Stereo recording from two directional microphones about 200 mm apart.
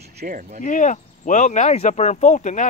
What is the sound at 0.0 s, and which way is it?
Speech, 50° right (ahead or behind).